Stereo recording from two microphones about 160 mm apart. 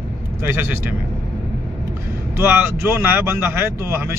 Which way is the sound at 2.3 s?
15° right (ahead or behind).